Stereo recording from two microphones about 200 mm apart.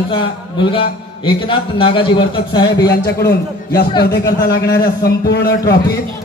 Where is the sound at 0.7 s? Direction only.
25° left (ahead or behind).